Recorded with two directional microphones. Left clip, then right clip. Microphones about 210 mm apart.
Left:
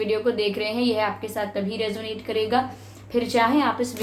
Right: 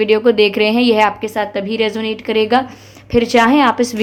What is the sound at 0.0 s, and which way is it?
A woman's voice, 45° right (ahead or behind).